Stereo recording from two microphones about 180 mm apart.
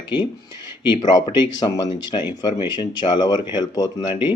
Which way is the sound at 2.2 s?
15° right (ahead or behind).